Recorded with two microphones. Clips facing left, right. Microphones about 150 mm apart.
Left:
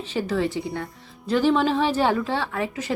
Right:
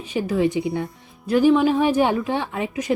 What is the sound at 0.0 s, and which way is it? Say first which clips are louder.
Speech: right 3 dB; 10° right (ahead or behind).